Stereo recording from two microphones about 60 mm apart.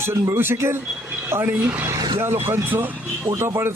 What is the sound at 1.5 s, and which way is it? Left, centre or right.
Speech, right.